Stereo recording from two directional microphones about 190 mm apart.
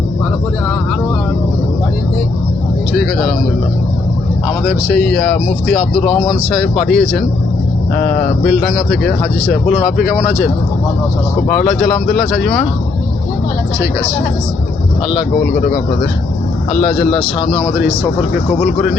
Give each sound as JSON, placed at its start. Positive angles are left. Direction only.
{"t": 2.9, "sound": "speech", "side_deg": 0}
{"t": 4.7, "sound": "speech", "side_deg": 5}
{"t": 7.9, "sound": "speech", "side_deg": 45}
{"t": 8.4, "sound": "speech", "side_deg": 0}
{"t": 11.4, "sound": "speech", "side_deg": 5}
{"t": 17.1, "sound": "speech", "side_deg": 30}